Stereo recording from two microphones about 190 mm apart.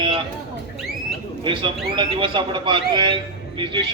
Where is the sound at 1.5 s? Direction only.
25° right (ahead or behind).